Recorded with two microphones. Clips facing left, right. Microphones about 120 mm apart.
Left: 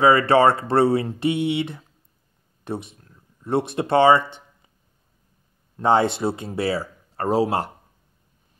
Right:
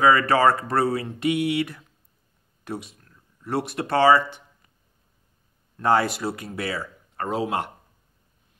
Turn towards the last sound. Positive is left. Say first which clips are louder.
# left 5 dB
turn(degrees=35)  # may be behind; listen again after turning